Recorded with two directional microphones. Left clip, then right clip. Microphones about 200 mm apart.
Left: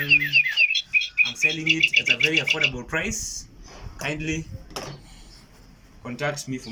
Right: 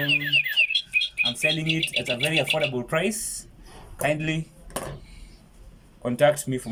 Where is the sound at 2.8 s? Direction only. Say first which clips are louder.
Right 2 dB; 35° right (ahead or behind).